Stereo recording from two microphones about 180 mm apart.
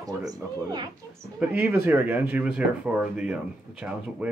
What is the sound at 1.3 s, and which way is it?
Speech, 5° right (ahead or behind).